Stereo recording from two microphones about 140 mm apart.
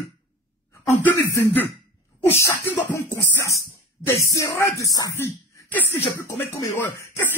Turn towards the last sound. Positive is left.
turn(degrees=20)  # may be behind; listen again after turning